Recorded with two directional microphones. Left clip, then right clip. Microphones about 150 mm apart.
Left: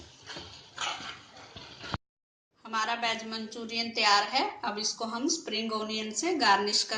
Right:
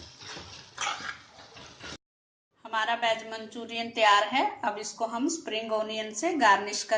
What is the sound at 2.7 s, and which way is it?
A woman's voice, 35° right (ahead or behind).